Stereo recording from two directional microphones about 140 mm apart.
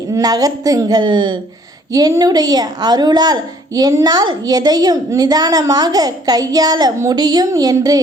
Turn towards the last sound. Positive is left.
turn(degrees=-25)  # may be behind; listen again after turning